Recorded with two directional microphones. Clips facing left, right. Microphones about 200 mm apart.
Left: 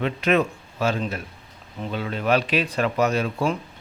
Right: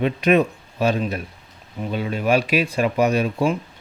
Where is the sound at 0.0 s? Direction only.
15° right (ahead or behind).